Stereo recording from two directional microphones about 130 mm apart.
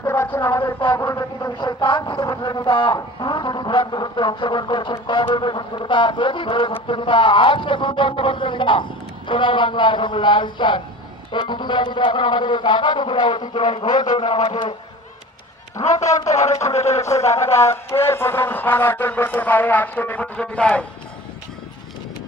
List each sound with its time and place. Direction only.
0.0 s a sound: 15° left (ahead or behind)
0.6 s speech: 40° left (ahead or behind)
0.9 s speech: 20° left (ahead or behind)
1.5 s speech: 35° left (ahead or behind)
15.8 s a man's voice: 65° left (ahead or behind)
17.0 s a sound: 20° left (ahead or behind)